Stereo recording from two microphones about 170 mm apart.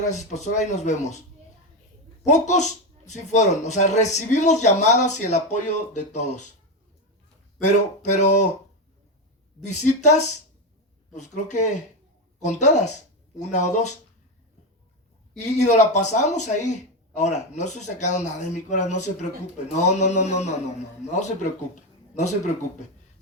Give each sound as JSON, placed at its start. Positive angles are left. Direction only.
{"t": 0.1, "sound": "speech", "side_deg": 45}
{"t": 2.2, "sound": "speech", "side_deg": 45}
{"t": 7.7, "sound": "speech", "side_deg": 45}
{"t": 9.6, "sound": "speech", "side_deg": 45}
{"t": 15.4, "sound": "speech", "side_deg": 45}